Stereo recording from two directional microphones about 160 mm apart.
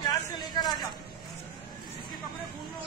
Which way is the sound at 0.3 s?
25° left (ahead or behind).